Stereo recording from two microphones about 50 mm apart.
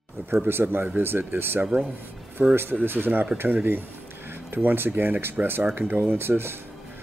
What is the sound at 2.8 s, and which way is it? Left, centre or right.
Speech, right.